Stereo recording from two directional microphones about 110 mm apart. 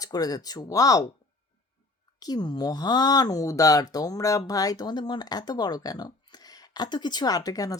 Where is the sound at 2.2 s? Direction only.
40° left (ahead or behind).